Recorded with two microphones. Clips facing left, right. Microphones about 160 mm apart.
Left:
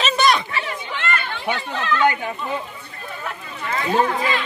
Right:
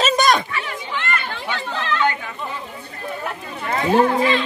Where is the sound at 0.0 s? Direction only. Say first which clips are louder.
Right 2 dB; 45° right (ahead or behind).